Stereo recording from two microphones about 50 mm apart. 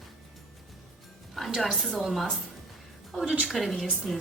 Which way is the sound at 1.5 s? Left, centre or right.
Centre.